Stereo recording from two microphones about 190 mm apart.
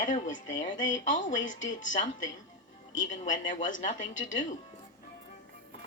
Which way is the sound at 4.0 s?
80° left.